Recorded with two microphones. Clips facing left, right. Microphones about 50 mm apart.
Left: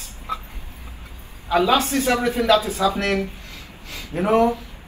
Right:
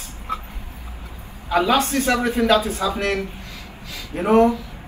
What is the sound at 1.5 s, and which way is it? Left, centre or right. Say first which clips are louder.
A man's voice: even; right.